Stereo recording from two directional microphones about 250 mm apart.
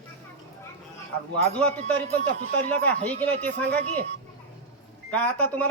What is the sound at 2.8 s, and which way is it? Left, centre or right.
Speech, centre.